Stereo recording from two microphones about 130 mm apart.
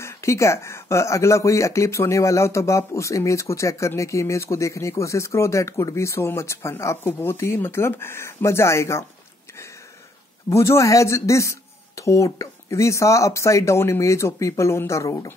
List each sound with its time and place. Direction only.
0.0 s speech: 20° left (ahead or behind)
10.5 s speech: 20° left (ahead or behind)